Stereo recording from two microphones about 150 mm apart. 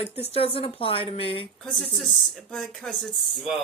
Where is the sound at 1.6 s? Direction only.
5° left (ahead or behind).